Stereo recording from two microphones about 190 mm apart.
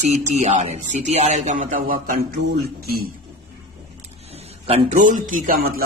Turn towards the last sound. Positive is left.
turn(degrees=-50)  # may be behind; listen again after turning